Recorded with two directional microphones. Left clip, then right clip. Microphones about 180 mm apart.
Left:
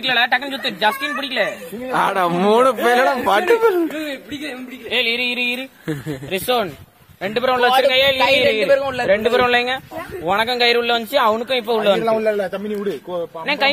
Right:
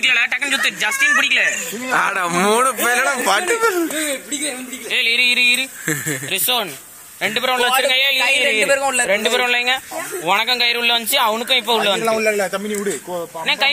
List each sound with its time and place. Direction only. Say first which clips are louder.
0.0 s speech: right 1 dB; 30° left (ahead or behind)
2.0 s speech: even; 5° left (ahead or behind)
3.1 s speech: left 2 dB; 35° left (ahead or behind)
4.9 s a man's voice: right 4 dB; 55° left (ahead or behind)
12.1 s speech: right 1 dB; 35° left (ahead or behind)
12.7 s speech: right 1 dB; 10° left (ahead or behind)
13.5 s a man's voice: right 2 dB; 50° left (ahead or behind)